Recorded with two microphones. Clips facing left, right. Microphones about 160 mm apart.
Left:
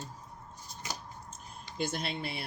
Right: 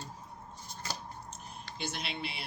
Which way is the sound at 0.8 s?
15° left (ahead or behind).